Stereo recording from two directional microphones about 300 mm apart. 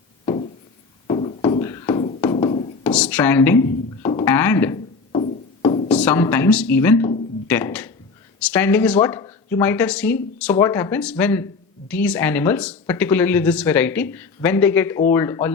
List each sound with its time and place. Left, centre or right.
1.0 s music: centre
2.8 s a sound: centre
5.9 s speech: centre